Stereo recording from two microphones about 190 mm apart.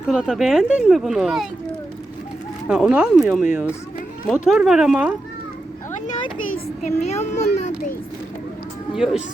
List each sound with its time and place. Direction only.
0.1 s speech: centre (ahead or behind)
2.6 s speech: 5° right (ahead or behind)
6.8 s a child's voice: 35° left (ahead or behind)
9.0 s speech: 5° right (ahead or behind)